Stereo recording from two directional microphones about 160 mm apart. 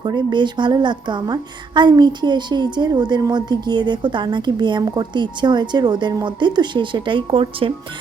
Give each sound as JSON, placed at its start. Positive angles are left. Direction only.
{"t": 0.0, "sound": "a woman's voice", "side_deg": -30}